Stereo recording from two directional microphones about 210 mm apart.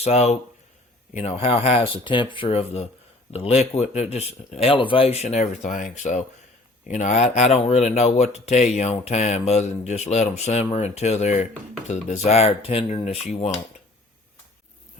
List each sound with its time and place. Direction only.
0.0 s speech: 30° left (ahead or behind)